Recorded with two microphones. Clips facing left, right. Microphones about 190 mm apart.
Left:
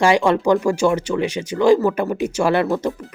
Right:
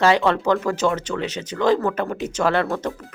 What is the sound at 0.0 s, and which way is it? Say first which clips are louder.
Speech: left 2 dB; 10° left (ahead or behind).